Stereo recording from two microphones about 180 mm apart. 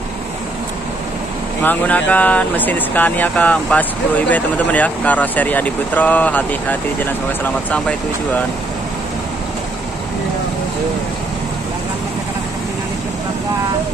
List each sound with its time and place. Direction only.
1.6 s speech: 10° left (ahead or behind)